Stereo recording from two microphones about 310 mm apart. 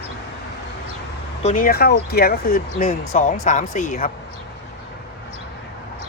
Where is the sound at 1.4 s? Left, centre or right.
Left.